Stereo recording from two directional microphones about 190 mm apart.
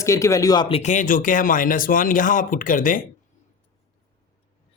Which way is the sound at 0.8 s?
40° left (ahead or behind).